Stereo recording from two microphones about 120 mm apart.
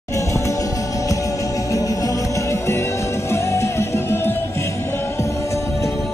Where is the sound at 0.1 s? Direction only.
25° left (ahead or behind).